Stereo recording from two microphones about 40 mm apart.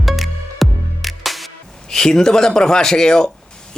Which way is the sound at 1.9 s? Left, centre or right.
Centre.